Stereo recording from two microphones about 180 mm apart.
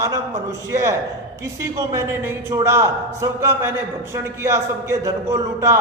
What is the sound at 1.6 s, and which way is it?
A man's voice, 15° right (ahead or behind).